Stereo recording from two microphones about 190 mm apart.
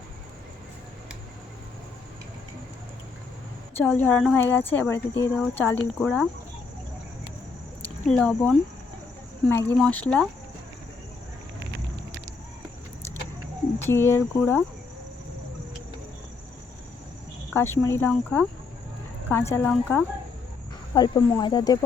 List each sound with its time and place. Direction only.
3.8 s a woman's voice: 10° left (ahead or behind)
7.8 s a sound: 5° left (ahead or behind)
9.5 s a woman's voice: 10° left (ahead or behind)
13.7 s a woman's voice: 15° left (ahead or behind)
17.5 s a woman's voice: 10° left (ahead or behind)
20.9 s speech: 20° left (ahead or behind)